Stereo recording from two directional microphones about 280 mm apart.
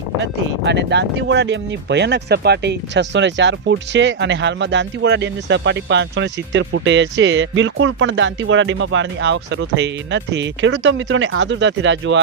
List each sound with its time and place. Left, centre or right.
0.2 s speech: right